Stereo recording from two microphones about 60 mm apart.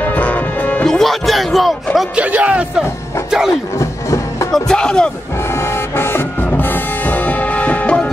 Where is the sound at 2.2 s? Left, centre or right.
Right.